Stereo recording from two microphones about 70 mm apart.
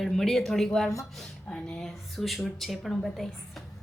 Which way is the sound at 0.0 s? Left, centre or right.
Centre.